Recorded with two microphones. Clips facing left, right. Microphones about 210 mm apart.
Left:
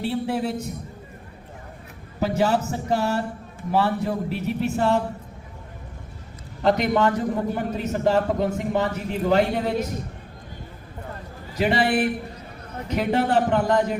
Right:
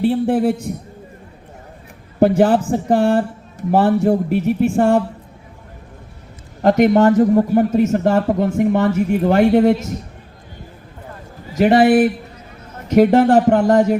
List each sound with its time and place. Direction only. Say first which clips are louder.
0.0 s a man's voice: right 9 dB; 50° right (ahead or behind)
2.1 s a man's voice: right 9 dB; 50° right (ahead or behind)
6.6 s a man's voice: right 8 dB; 50° right (ahead or behind)
11.5 s a man's voice: right 10 dB; 50° right (ahead or behind)